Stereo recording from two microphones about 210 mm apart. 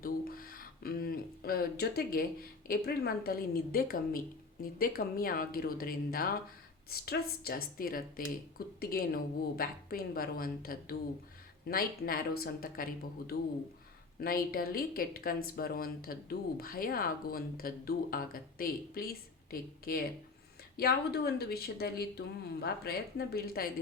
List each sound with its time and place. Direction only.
0.0 s speech: 45° left (ahead or behind)